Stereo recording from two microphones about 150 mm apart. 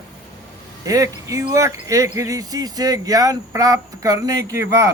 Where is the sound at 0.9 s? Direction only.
20° right (ahead or behind).